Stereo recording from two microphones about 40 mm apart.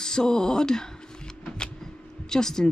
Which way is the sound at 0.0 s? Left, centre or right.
Centre.